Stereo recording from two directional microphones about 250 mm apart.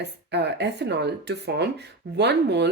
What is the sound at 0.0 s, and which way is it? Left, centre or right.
Speech, right.